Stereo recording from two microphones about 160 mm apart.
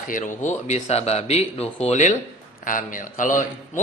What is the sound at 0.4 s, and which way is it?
Speech, 45° left (ahead or behind).